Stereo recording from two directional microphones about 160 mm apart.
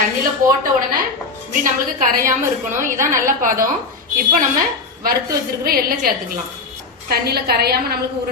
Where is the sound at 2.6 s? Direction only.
55° right (ahead or behind).